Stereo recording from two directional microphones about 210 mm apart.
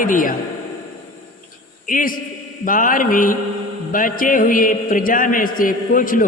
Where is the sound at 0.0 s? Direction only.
40° left (ahead or behind).